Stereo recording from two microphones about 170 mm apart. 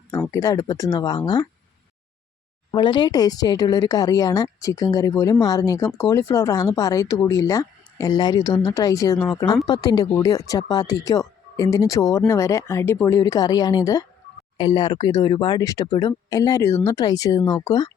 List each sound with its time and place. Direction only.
0.3 s speech: 20° left (ahead or behind)
2.7 s speech: 25° left (ahead or behind)